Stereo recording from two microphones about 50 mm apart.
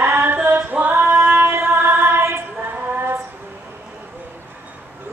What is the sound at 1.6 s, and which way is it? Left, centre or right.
Music, right.